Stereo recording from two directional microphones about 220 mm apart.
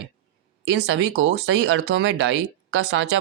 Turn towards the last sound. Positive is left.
turn(degrees=-55)  # may be behind; listen again after turning